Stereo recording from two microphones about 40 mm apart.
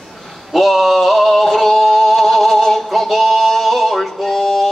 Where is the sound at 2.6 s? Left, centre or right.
Centre.